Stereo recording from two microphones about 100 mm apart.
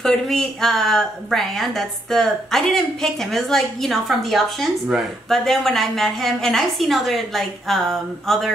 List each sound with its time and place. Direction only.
0.0 s speech: 5° left (ahead or behind)